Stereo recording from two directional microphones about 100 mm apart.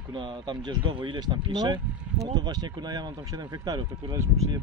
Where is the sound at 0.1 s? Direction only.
50° right (ahead or behind).